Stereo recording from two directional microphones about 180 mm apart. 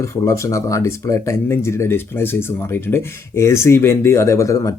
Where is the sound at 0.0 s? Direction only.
15° left (ahead or behind).